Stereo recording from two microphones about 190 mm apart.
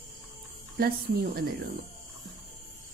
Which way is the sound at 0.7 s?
55° right (ahead or behind).